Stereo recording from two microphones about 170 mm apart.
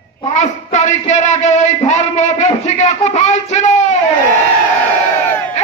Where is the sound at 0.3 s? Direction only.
45° left (ahead or behind).